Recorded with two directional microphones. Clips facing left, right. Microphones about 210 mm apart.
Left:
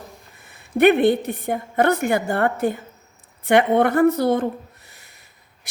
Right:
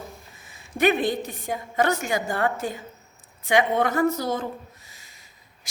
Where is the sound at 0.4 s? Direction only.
60° left (ahead or behind).